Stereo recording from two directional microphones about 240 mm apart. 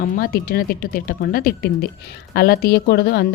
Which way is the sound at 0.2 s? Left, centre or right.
Left.